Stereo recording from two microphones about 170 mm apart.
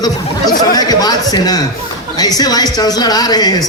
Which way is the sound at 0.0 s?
25° left (ahead or behind).